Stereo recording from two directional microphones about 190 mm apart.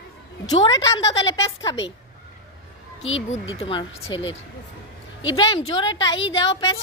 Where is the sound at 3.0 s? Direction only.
90° left.